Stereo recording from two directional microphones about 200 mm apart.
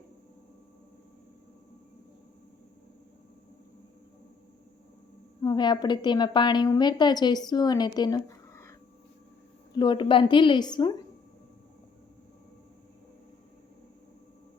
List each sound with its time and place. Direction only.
5.4 s a woman's voice: 20° left (ahead or behind)
9.7 s a woman's voice: 20° left (ahead or behind)